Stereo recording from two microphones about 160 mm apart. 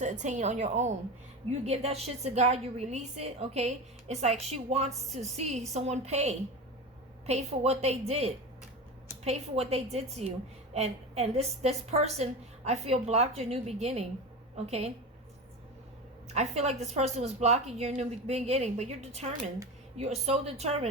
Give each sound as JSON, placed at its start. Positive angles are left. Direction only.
{"t": 0.0, "sound": "a woman's voice", "side_deg": -50}
{"t": 16.3, "sound": "a woman's voice", "side_deg": -45}